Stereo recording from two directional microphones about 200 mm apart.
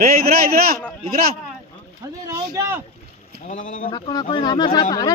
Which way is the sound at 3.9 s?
20° left (ahead or behind).